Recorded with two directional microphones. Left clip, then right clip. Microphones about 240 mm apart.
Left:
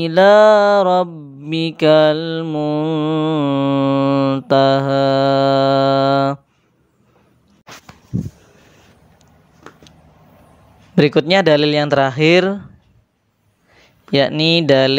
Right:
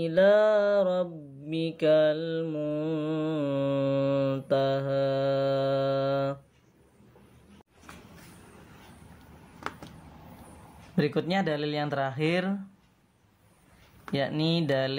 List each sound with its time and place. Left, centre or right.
0.0 s mantra: left
11.0 s mantra: left
14.1 s mantra: left